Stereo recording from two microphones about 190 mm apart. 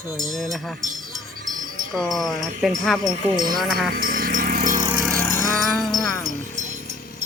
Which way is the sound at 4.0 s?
50° right (ahead or behind).